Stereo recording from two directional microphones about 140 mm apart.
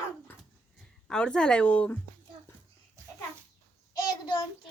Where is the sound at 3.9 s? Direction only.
35° left (ahead or behind).